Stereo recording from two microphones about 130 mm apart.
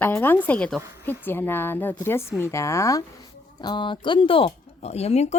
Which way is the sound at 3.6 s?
35° left (ahead or behind).